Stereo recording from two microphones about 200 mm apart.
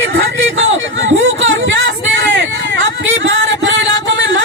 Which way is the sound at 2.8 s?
70° right (ahead or behind).